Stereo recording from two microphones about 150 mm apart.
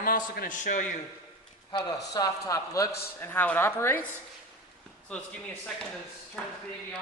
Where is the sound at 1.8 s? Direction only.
20° left (ahead or behind).